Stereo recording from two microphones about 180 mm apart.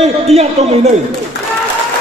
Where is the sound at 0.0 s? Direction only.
35° right (ahead or behind).